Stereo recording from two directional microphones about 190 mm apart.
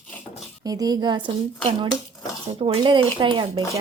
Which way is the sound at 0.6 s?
20° right (ahead or behind).